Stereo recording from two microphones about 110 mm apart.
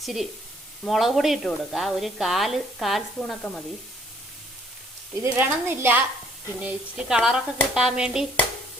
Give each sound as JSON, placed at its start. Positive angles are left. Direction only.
{"t": 0.0, "sound": "speech", "side_deg": 0}
{"t": 5.2, "sound": "a woman's voice", "side_deg": -20}
{"t": 6.6, "sound": "speech", "side_deg": -10}